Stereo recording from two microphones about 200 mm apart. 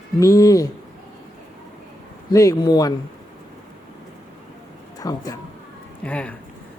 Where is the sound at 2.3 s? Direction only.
15° left (ahead or behind).